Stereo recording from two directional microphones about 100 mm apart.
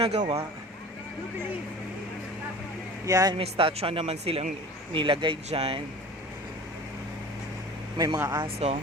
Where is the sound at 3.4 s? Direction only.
75° right (ahead or behind).